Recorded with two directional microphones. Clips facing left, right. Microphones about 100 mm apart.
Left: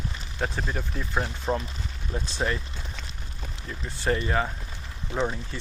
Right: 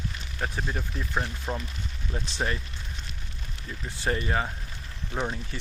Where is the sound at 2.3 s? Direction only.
25° right (ahead or behind).